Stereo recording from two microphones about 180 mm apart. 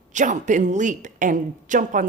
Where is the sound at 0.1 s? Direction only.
45° right (ahead or behind).